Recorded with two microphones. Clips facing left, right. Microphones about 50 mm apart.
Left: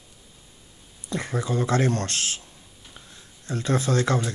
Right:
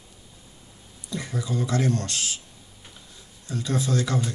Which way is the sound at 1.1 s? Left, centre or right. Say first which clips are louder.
Left 3 dB; left.